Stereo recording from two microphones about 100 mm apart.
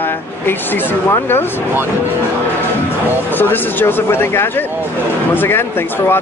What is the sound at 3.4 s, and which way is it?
Speech, 20° left (ahead or behind).